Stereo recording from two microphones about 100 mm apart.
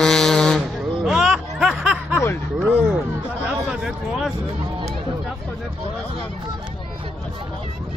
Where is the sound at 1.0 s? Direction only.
5° right (ahead or behind).